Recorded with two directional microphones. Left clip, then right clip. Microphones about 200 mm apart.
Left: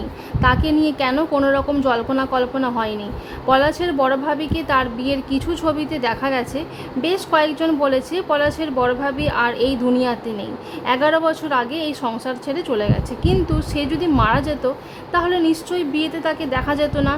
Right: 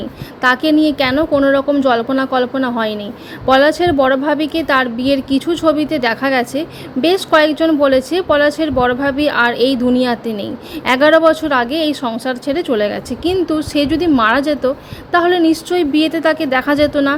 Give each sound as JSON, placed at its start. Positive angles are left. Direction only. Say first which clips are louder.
{"t": 0.4, "sound": "a woman's voice", "louder": "right 5 dB", "side_deg": -20}